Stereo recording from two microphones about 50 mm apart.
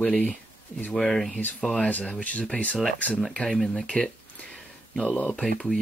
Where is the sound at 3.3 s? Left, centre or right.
Centre.